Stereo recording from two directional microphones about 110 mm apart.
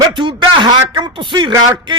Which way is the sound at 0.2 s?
45° right (ahead or behind).